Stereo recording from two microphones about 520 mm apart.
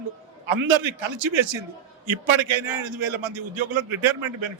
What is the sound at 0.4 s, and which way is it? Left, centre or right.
A man's voice, right.